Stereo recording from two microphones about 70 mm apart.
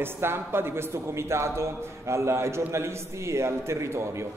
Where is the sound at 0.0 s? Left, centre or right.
Right.